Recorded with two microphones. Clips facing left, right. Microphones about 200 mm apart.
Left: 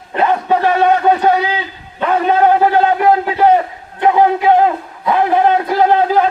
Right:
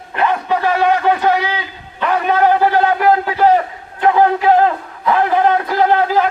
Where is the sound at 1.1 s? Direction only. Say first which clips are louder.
Left 2 dB; 30° left (ahead or behind).